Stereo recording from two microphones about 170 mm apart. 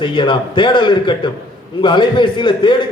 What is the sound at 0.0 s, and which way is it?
A man's voice, 30° left (ahead or behind).